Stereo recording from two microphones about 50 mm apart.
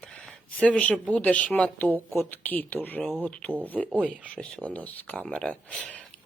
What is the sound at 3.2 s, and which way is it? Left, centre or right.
Speech, left.